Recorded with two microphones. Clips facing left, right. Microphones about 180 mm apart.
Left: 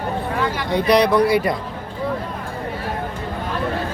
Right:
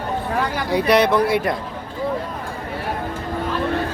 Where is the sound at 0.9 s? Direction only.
5° right (ahead or behind).